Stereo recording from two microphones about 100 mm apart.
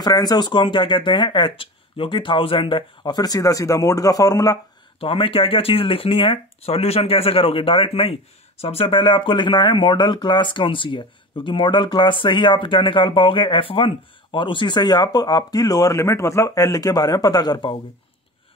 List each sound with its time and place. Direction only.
0.0 s speech: 45° left (ahead or behind)
5.0 s speech: 65° left (ahead or behind); by 17.7 s 45° left (ahead or behind)